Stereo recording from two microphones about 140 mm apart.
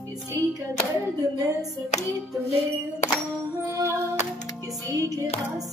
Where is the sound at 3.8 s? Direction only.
20° right (ahead or behind).